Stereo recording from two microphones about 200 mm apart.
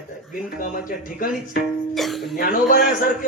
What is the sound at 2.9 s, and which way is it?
Speech, 40° left (ahead or behind).